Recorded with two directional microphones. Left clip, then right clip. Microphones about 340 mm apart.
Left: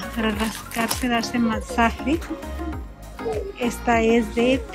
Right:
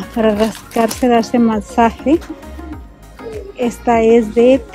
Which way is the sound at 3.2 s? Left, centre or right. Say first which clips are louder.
Right 5 dB; centre.